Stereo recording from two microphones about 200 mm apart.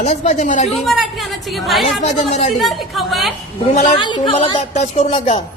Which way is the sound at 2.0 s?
35° left (ahead or behind).